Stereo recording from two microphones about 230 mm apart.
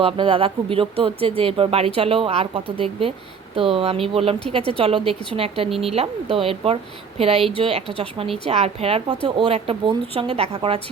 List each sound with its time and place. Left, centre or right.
0.0 s speech: right